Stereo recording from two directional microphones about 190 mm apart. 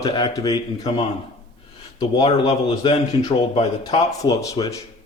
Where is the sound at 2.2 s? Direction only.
25° left (ahead or behind).